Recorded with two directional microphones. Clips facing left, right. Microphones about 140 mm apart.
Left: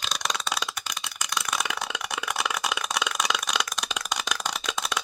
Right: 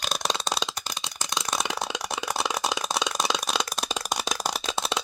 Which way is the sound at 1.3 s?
25° right (ahead or behind).